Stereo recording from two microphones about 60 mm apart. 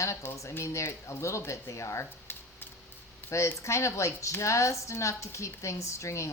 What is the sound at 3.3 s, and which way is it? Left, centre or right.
A woman's voice, left.